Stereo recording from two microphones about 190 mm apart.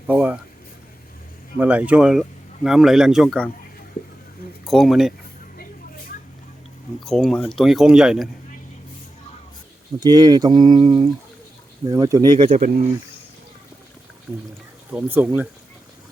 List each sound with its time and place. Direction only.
0.1 s a sound: 5° right (ahead or behind)
1.5 s speech: 5° right (ahead or behind)
4.6 s speech: centre (ahead or behind)
7.0 s speech: centre (ahead or behind)
10.0 s speech: 20° right (ahead or behind)
12.5 s speech: 40° right (ahead or behind)
14.3 s speech: 5° right (ahead or behind)